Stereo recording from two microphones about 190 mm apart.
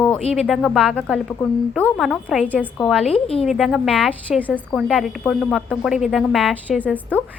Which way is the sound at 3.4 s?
Centre (ahead or behind).